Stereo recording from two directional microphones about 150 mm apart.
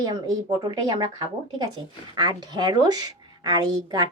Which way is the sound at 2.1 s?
25° right (ahead or behind).